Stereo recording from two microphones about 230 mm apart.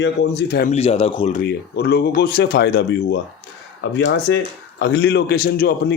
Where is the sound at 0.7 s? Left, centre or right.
Left.